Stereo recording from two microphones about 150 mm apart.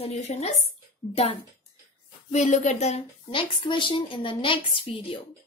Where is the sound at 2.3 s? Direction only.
50° left (ahead or behind).